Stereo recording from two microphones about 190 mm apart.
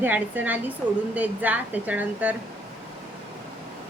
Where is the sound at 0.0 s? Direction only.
10° right (ahead or behind).